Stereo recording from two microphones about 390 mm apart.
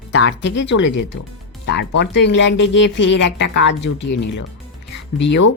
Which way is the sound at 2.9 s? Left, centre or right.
Left.